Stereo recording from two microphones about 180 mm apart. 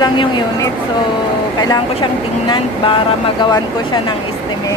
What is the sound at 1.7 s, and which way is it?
Speech, 25° left (ahead or behind).